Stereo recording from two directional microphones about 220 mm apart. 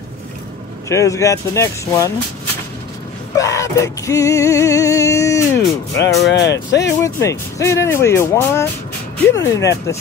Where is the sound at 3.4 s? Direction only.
15° left (ahead or behind).